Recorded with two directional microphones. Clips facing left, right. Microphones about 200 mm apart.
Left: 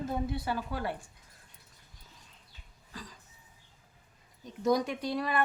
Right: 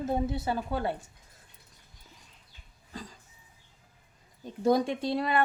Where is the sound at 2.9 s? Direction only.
25° right (ahead or behind).